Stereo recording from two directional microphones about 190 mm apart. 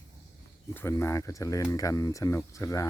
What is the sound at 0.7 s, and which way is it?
Speech, 15° left (ahead or behind).